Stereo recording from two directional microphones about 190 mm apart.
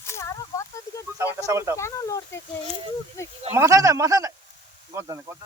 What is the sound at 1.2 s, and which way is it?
Speech, 15° right (ahead or behind).